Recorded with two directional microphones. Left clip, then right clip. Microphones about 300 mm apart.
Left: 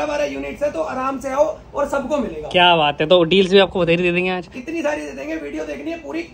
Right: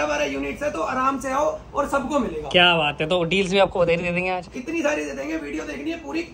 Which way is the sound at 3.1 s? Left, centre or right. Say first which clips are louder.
Left 12 dB; left.